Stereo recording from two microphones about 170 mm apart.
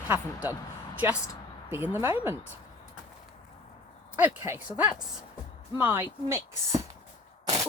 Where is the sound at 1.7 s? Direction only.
10° right (ahead or behind).